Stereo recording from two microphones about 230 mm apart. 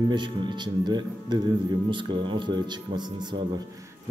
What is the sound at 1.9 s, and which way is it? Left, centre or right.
Speech, right.